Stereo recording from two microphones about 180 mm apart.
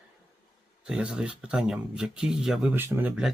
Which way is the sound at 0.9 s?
5° right (ahead or behind).